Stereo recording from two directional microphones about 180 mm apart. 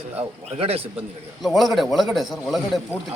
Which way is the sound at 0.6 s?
35° right (ahead or behind).